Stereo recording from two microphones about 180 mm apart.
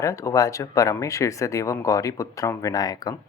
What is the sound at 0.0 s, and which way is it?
Speech, 15° left (ahead or behind).